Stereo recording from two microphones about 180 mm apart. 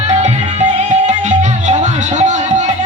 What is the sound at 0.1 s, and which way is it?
Music, 40° right (ahead or behind).